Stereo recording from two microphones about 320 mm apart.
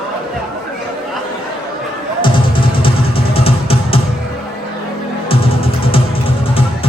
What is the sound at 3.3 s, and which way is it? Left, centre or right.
Music, centre.